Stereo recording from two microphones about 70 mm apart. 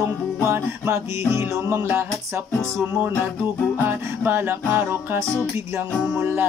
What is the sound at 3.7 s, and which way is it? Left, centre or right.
Music, right.